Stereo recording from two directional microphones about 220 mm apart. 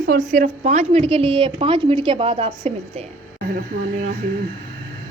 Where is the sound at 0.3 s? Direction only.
35° right (ahead or behind).